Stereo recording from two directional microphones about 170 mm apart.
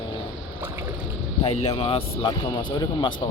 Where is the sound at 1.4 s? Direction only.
35° left (ahead or behind).